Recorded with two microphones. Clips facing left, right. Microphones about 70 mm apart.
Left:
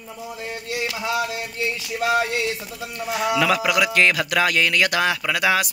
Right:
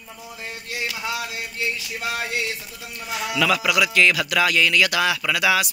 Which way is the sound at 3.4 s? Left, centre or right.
Left.